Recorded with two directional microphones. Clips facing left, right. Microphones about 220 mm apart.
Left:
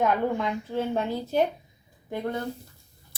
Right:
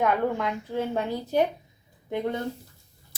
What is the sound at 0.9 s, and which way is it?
Speech, 15° right (ahead or behind).